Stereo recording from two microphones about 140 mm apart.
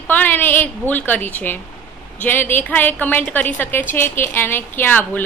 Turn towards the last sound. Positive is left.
turn(degrees=15)  # may be behind; listen again after turning